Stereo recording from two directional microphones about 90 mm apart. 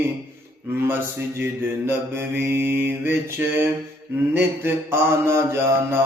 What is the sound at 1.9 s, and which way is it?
Mantra, 25° right (ahead or behind).